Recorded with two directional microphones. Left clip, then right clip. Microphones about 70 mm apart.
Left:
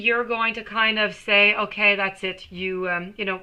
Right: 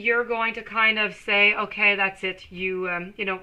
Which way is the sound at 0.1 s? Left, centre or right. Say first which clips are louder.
Even; right.